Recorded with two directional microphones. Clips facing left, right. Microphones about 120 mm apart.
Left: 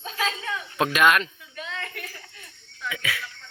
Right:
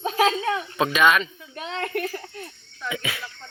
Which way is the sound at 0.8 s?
Centre (ahead or behind).